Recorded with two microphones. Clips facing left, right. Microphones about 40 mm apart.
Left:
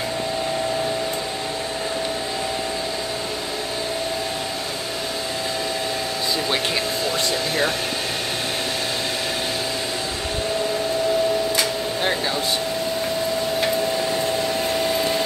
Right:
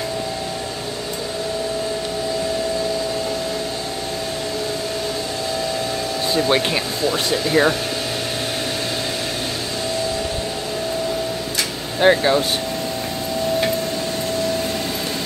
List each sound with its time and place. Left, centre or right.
12.0 s speech: right